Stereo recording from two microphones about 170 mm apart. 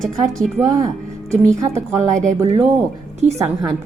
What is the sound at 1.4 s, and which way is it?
A woman's voice, 15° right (ahead or behind).